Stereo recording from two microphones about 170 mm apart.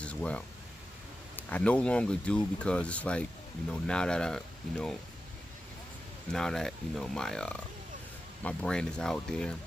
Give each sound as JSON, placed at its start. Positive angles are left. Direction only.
{"t": 0.0, "sound": "a sound", "side_deg": 5}
{"t": 1.3, "sound": "speech", "side_deg": 10}
{"t": 6.3, "sound": "speech", "side_deg": 5}